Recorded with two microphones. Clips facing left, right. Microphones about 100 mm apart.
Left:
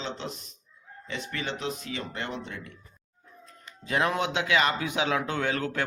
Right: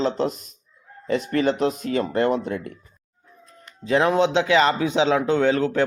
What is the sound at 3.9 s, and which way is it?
Speech, 30° right (ahead or behind).